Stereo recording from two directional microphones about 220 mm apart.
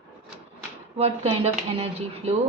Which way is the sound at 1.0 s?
25° right (ahead or behind).